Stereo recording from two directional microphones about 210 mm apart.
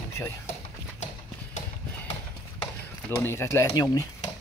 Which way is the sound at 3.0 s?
10° left (ahead or behind).